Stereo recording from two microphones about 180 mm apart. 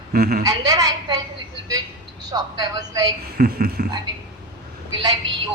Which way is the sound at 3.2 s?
60° right (ahead or behind).